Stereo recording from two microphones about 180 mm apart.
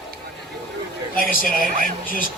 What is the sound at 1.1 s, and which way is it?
Speech, 50° left (ahead or behind).